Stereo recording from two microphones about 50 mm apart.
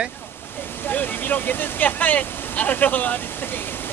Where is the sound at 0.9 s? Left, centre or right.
Left.